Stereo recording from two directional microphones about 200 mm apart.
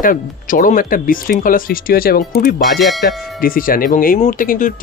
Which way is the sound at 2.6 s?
Centre (ahead or behind).